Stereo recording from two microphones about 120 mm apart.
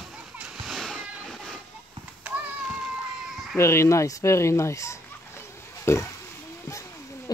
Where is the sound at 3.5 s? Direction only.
25° left (ahead or behind).